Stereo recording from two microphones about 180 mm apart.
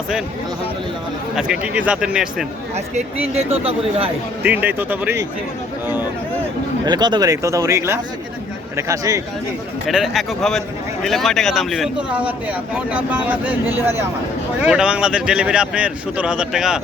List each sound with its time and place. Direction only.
1.4 s speech: 5° right (ahead or behind)
2.7 s speech: 35° right (ahead or behind)
4.4 s a man's voice: 10° right (ahead or behind)
6.8 s a man's voice: 25° right (ahead or behind)
9.8 s a man's voice: centre (ahead or behind)